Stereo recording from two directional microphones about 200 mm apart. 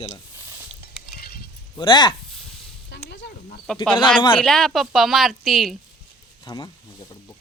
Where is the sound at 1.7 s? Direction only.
20° left (ahead or behind).